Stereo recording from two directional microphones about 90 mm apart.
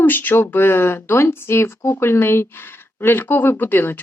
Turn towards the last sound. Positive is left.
turn(degrees=20)  # may be behind; listen again after turning